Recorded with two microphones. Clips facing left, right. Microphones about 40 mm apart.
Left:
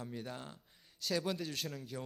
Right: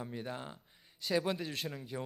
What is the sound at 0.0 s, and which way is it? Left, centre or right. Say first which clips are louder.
A man's voice: right 3 dB; centre.